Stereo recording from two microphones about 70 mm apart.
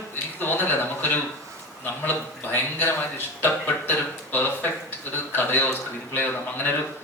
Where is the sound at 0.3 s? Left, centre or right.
Left.